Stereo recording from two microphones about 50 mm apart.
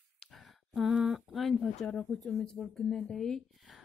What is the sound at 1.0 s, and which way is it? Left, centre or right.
Speech, centre.